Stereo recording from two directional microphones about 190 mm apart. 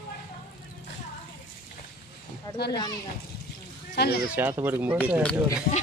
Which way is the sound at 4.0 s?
55° left (ahead or behind).